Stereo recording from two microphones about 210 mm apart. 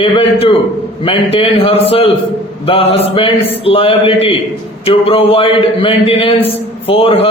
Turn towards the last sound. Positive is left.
turn(degrees=25)  # may be behind; listen again after turning